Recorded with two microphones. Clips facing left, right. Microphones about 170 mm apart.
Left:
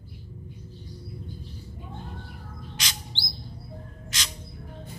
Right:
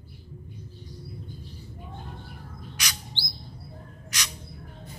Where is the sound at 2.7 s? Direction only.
25° left (ahead or behind).